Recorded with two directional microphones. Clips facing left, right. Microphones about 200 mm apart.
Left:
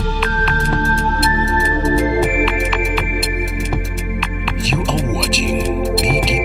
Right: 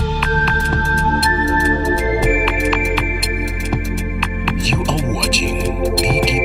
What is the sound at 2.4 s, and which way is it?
Music, centre (ahead or behind).